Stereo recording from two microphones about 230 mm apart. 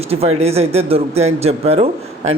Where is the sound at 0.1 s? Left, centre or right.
Right.